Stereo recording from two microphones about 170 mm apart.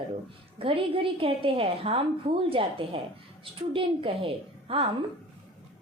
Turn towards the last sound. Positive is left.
turn(degrees=-35)  # may be behind; listen again after turning